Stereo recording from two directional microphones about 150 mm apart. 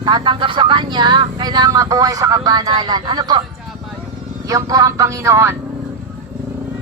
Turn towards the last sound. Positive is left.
turn(degrees=-20)  # may be behind; listen again after turning